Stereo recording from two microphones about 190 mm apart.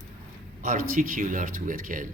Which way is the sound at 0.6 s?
45° right (ahead or behind).